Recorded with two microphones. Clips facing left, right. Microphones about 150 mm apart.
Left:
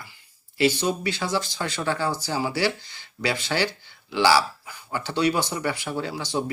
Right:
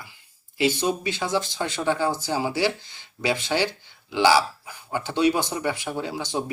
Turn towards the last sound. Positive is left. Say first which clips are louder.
# left 1 dB
turn(degrees=-20)  # may be behind; listen again after turning